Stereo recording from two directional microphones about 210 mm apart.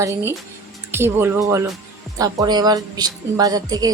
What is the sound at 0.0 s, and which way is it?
Speech, 10° right (ahead or behind).